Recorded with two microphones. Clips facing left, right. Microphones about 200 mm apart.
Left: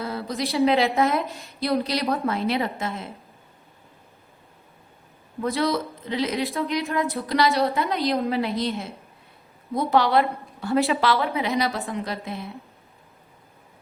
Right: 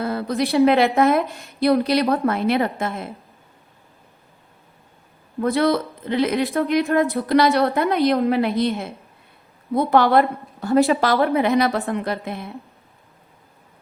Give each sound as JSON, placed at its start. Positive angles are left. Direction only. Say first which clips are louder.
{"t": 0.0, "sound": "a sound", "louder": "right 6 dB", "side_deg": -55}
{"t": 0.5, "sound": "a woman's voice", "louder": "right 4 dB", "side_deg": -60}
{"t": 5.4, "sound": "a woman's voice", "louder": "right 5 dB", "side_deg": -55}
{"t": 9.7, "sound": "a woman's voice", "louder": "right 4 dB", "side_deg": -55}